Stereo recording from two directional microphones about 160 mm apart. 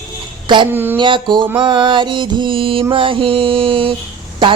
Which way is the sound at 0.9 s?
30° right (ahead or behind).